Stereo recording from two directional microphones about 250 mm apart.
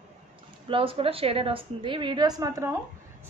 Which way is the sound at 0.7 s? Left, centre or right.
Right.